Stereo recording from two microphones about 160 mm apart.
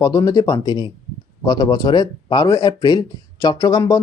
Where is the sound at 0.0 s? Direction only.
20° left (ahead or behind).